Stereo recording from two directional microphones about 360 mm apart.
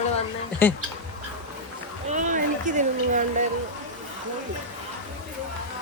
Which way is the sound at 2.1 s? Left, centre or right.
Right.